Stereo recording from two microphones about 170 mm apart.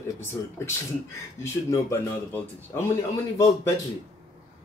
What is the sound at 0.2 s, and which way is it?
Speech, 15° left (ahead or behind).